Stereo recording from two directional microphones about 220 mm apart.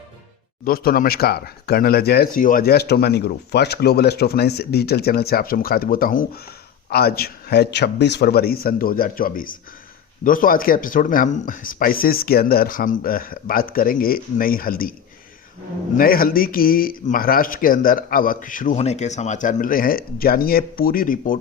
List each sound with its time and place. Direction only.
0.6 s speech: 40° left (ahead or behind)
16.0 s speech: 40° left (ahead or behind)